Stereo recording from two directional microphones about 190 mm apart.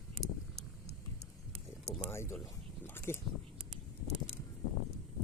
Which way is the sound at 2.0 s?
15° left (ahead or behind).